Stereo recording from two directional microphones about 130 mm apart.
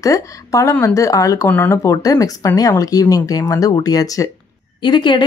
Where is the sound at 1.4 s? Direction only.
15° left (ahead or behind).